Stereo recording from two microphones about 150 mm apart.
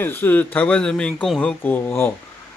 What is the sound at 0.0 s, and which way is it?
Speech, 15° left (ahead or behind).